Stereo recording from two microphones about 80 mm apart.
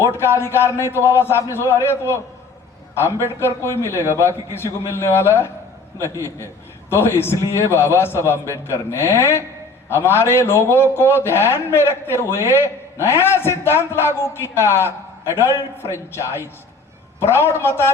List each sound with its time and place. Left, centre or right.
0.0 s a man's voice: left
6.0 s a man's voice: right
6.9 s a man's voice: left